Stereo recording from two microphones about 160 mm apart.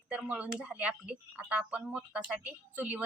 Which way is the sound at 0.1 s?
10° right (ahead or behind).